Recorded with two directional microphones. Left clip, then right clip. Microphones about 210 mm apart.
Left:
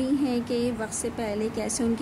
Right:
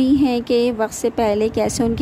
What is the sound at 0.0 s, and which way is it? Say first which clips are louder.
Speech: right 9 dB; 35° right (ahead or behind).